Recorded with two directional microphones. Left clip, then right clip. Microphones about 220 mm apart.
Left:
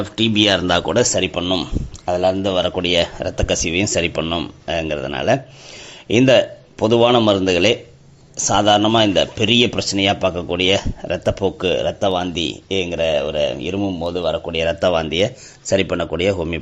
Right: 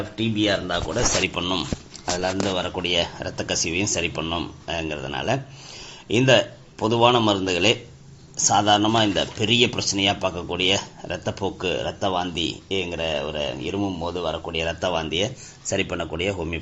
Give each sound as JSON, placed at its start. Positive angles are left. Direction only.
{"t": 0.2, "sound": "a man's voice", "side_deg": 50}